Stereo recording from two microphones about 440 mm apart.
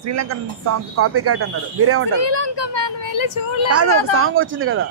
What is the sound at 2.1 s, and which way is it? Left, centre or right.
Speech, left.